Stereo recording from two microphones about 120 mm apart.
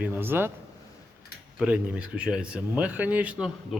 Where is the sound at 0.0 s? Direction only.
20° right (ahead or behind).